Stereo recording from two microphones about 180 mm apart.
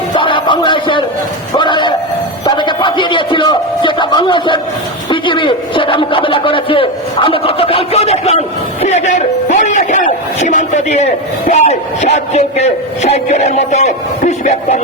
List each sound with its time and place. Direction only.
0.2 s speech: 25° left (ahead or behind)